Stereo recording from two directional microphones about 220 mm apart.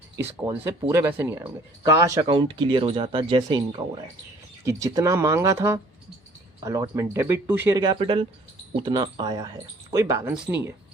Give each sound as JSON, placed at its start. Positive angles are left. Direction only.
{"t": 0.2, "sound": "speech", "side_deg": -10}